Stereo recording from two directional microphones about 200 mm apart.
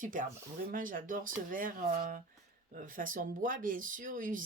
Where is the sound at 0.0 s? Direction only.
40° right (ahead or behind).